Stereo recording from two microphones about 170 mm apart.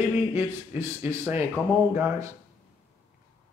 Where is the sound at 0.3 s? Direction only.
15° right (ahead or behind).